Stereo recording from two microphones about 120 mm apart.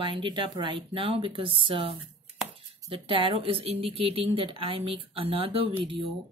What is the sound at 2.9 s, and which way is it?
Speech, 45° right (ahead or behind).